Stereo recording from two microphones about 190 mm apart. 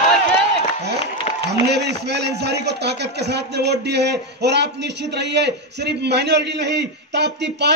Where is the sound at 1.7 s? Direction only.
60° right (ahead or behind).